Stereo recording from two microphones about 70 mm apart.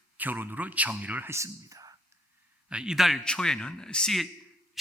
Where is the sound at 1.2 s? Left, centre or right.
Right.